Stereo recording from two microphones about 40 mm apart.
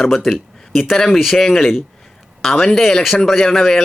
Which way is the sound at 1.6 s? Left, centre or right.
Centre.